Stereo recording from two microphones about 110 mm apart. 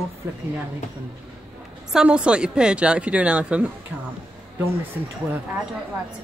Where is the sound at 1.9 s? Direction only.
10° right (ahead or behind).